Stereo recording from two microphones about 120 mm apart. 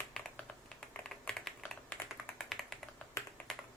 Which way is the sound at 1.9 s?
5° left (ahead or behind).